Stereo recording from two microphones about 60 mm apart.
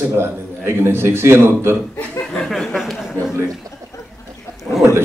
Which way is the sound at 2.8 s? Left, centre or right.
Centre.